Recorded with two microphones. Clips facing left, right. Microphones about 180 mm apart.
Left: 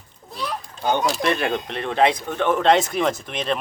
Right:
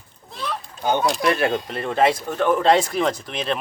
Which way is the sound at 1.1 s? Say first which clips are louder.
Right 2 dB; centre (ahead or behind).